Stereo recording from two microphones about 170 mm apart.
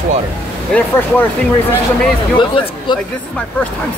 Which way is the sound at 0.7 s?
10° left (ahead or behind).